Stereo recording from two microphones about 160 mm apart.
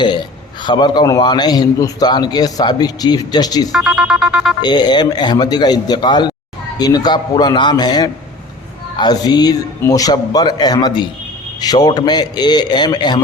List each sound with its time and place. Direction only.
0.6 s a man's voice: 30° left (ahead or behind)
3.7 s music: 5° right (ahead or behind)
4.6 s a man's voice: 25° left (ahead or behind)